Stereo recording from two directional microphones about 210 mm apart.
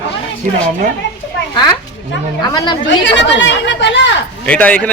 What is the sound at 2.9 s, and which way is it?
Speech, 60° left (ahead or behind).